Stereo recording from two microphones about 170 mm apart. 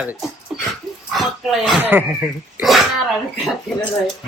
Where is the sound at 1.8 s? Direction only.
10° right (ahead or behind).